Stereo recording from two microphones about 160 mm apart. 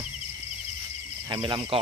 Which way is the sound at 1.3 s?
30° right (ahead or behind).